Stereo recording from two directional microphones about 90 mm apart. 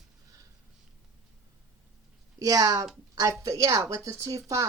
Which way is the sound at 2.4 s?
40° right (ahead or behind).